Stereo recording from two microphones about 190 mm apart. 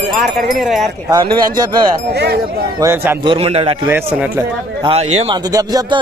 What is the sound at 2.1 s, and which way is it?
Speech, 60° right (ahead or behind).